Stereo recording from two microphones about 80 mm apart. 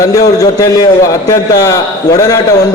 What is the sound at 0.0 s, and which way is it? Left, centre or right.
A man's voice, left.